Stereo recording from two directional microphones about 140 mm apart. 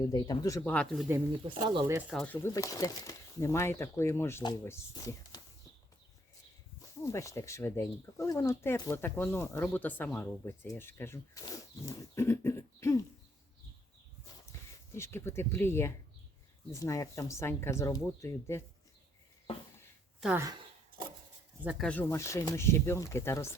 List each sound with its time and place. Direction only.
0.0 s speech: 25° left (ahead or behind)
0.6 s speech: 10° left (ahead or behind)
1.5 s speech: 35° right (ahead or behind)
2.0 s speech: 5° right (ahead or behind)
2.2 s speech: 10° left (ahead or behind)
2.5 s speech: 25° left (ahead or behind)
7.0 s speech: 20° left (ahead or behind)
14.9 s speech: 20° left (ahead or behind)
21.8 s speech: 10° left (ahead or behind)
22.1 s speech: 20° left (ahead or behind)